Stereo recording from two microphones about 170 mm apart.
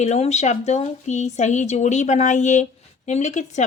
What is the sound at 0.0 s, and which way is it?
A woman's voice, 40° left (ahead or behind).